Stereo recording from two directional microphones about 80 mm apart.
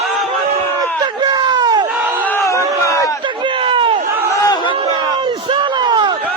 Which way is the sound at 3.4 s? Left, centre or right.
Right.